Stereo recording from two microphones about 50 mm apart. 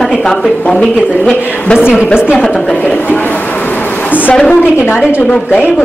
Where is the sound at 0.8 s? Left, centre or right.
Left.